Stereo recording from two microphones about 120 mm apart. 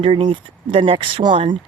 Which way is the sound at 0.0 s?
45° right (ahead or behind).